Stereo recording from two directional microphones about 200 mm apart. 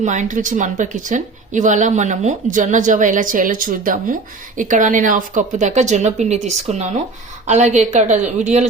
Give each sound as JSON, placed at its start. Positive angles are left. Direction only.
{"t": 0.0, "sound": "speech", "side_deg": -40}